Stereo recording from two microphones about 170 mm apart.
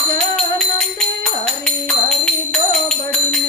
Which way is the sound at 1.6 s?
5° left (ahead or behind).